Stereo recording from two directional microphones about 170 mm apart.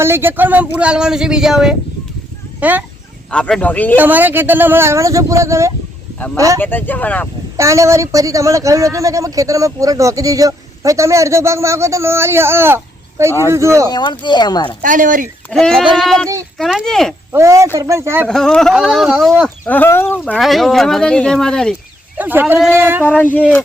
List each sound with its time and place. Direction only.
0.0 s speech: 15° right (ahead or behind)
3.2 s speech: 5° left (ahead or behind)
3.9 s speech: 10° right (ahead or behind)
6.6 s speech: 10° left (ahead or behind)
7.5 s speech: 20° right (ahead or behind)
13.9 s speech: 25° left (ahead or behind)
14.8 s speech: 50° right (ahead or behind)
15.4 s speech: 5° left (ahead or behind)
17.3 s speech: 15° right (ahead or behind)
18.3 s speech: 5° left (ahead or behind)
22.2 s speech: 10° right (ahead or behind)
23.0 s speech: 10° left (ahead or behind)